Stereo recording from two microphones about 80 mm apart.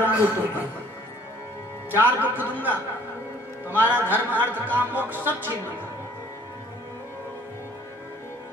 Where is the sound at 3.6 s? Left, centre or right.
Right.